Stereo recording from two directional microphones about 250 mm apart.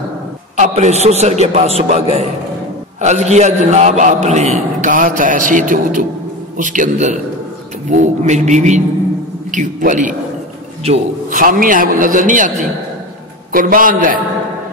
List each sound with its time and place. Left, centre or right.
0.6 s a man's voice: right